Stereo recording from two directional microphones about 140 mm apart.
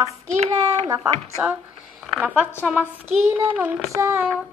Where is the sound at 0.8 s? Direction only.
25° right (ahead or behind).